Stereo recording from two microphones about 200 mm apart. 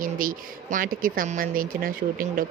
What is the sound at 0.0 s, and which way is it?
Speech, 45° right (ahead or behind).